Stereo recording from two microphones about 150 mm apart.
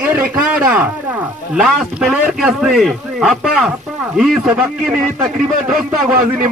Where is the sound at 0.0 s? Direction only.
10° right (ahead or behind).